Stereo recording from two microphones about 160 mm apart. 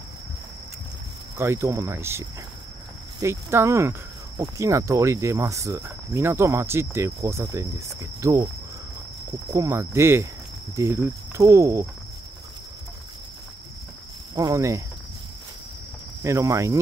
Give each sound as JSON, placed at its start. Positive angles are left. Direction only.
{"t": 1.4, "sound": "speech", "side_deg": -15}
{"t": 4.4, "sound": "cricket", "side_deg": -20}
{"t": 9.5, "sound": "speech", "side_deg": -20}
{"t": 10.8, "sound": "cricket", "side_deg": -15}
{"t": 14.3, "sound": "cricket", "side_deg": -20}
{"t": 16.2, "sound": "cricket", "side_deg": -20}